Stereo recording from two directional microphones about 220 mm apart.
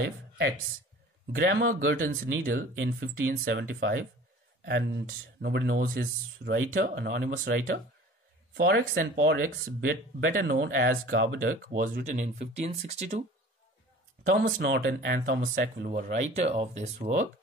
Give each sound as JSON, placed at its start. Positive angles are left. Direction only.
{"t": 1.3, "sound": "speech", "side_deg": -45}
{"t": 9.2, "sound": "speech", "side_deg": -50}
{"t": 14.3, "sound": "speech", "side_deg": -40}